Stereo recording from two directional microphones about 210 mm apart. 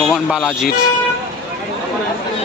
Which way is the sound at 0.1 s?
Centre (ahead or behind).